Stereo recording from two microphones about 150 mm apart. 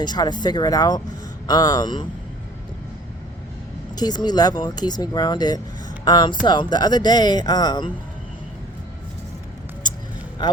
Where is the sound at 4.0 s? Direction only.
25° left (ahead or behind).